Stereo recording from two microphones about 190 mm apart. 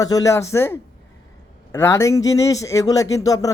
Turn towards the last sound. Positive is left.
turn(degrees=20)  # may be behind; listen again after turning